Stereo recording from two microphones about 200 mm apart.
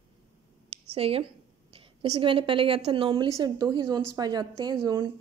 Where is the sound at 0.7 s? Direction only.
30° right (ahead or behind).